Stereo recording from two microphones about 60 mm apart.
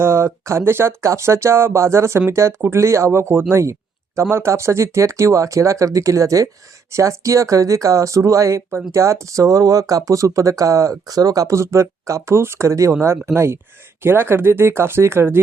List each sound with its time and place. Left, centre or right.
0.0 s speech: right
10.1 s speech: right
12.9 s speech: right